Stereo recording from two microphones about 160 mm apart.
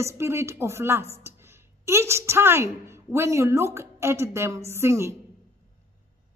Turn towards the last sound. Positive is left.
turn(degrees=-15)  # may be behind; listen again after turning